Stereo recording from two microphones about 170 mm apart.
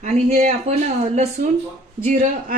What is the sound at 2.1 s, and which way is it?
Speech, 45° right (ahead or behind).